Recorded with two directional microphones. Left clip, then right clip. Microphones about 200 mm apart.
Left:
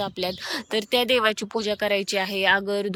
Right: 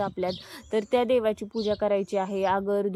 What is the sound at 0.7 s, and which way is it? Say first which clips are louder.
Speech: left 1 dB; 50° left (ahead or behind).